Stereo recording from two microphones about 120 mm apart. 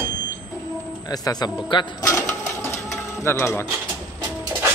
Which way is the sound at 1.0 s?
35° left (ahead or behind).